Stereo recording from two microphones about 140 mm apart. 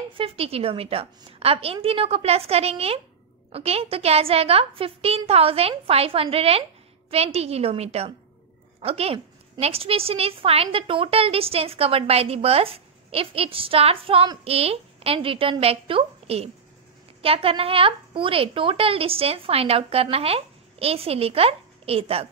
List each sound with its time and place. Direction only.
0.1 s a woman's voice: 40° right (ahead or behind)